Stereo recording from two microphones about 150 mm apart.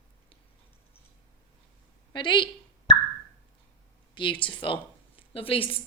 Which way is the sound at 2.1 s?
30° left (ahead or behind).